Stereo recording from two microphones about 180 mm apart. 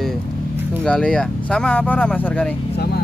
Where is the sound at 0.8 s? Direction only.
5° left (ahead or behind).